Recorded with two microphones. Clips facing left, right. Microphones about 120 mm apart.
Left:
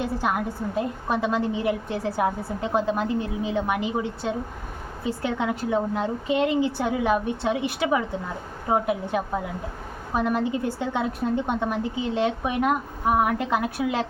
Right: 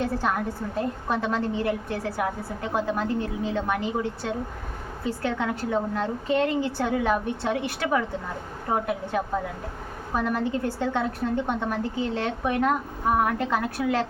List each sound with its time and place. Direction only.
0.0 s a woman's voice: 15° left (ahead or behind)